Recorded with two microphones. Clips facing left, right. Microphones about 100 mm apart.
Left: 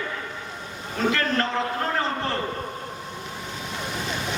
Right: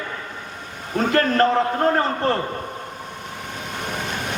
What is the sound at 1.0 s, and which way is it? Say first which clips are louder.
A man's voice: right 6 dB; 50° right (ahead or behind).